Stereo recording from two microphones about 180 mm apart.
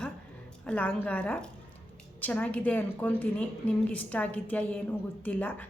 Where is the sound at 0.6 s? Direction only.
5° left (ahead or behind).